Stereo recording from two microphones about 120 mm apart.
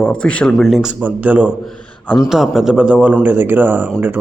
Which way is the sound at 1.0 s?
15° right (ahead or behind).